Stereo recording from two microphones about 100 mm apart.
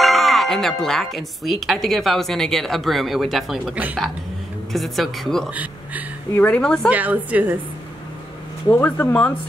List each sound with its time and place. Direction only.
0.0 s speech: centre (ahead or behind)
3.7 s a woman's voice: 15° right (ahead or behind)
4.7 s speech: centre (ahead or behind)
5.5 s speech: 15° right (ahead or behind)
6.3 s a woman's voice: 15° left (ahead or behind)
6.9 s a woman's voice: 15° right (ahead or behind)
8.6 s speech: 25° left (ahead or behind)